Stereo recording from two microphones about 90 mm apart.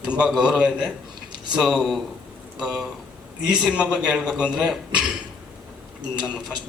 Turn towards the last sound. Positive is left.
turn(degrees=-5)  # may be behind; listen again after turning